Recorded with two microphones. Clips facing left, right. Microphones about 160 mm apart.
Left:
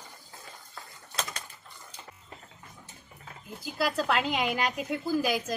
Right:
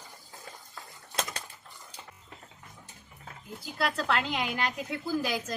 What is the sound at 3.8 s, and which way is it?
A woman's voice, 15° left (ahead or behind).